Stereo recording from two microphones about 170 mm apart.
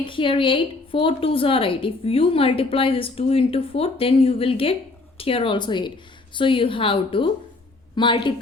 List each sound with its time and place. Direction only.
0.0 s a woman's voice: 30° left (ahead or behind)